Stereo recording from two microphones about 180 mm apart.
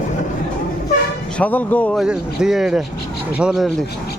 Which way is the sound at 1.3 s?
10° left (ahead or behind).